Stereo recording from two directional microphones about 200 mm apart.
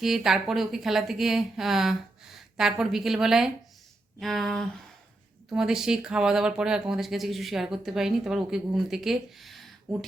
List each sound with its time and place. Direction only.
0.0 s speech: centre (ahead or behind)